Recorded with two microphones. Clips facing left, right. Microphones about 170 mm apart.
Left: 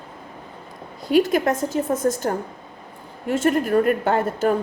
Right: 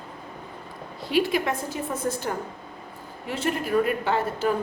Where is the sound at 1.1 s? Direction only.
45° left (ahead or behind).